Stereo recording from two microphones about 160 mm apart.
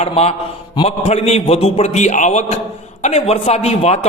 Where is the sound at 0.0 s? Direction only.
40° left (ahead or behind).